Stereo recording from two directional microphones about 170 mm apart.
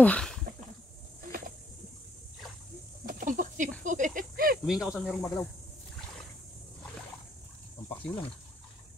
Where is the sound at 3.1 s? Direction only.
55° right (ahead or behind).